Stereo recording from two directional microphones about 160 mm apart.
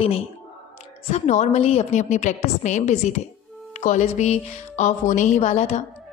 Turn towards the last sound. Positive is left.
turn(degrees=45)  # may be behind; listen again after turning